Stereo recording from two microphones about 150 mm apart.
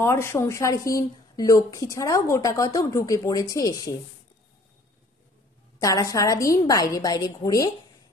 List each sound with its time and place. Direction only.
0.0 s a woman's voice: 15° left (ahead or behind)
5.8 s a woman's voice: 25° left (ahead or behind)